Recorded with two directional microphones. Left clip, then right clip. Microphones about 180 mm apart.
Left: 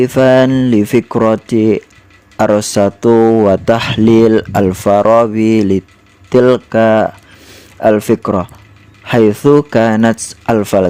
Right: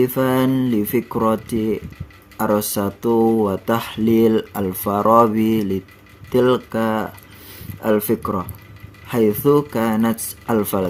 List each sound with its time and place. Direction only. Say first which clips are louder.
0.0 s speech: left 10 dB; 45° left (ahead or behind)